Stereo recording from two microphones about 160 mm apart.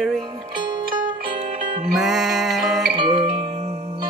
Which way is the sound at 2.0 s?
Centre (ahead or behind).